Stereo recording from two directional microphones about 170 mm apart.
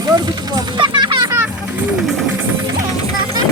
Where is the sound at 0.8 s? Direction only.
25° right (ahead or behind).